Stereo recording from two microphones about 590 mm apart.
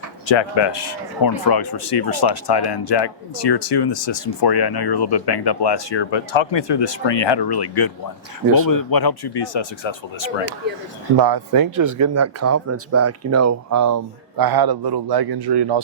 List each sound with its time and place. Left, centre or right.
0.3 s speech: left
1.8 s speech: left
11.2 s speech: right